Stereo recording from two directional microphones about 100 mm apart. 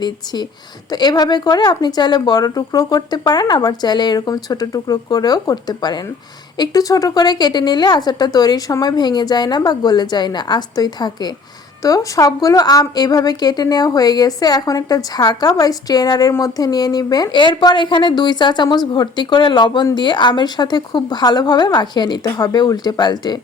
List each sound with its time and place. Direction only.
0.9 s a woman's voice: 45° left (ahead or behind)